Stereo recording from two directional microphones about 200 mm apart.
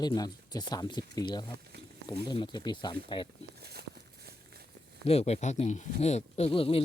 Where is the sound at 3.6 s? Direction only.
50° right (ahead or behind).